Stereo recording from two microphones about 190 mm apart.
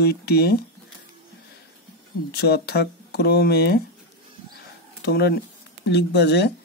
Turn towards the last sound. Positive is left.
turn(degrees=65)  # may be behind; listen again after turning